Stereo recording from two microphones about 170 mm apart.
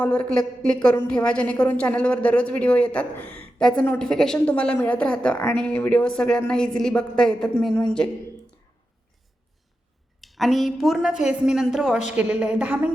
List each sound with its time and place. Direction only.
0.0 s a woman's voice: 5° left (ahead or behind)
10.2 s a woman's voice: centre (ahead or behind)